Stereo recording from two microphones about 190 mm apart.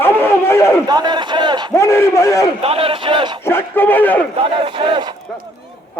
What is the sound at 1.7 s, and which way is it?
Speech, 15° left (ahead or behind).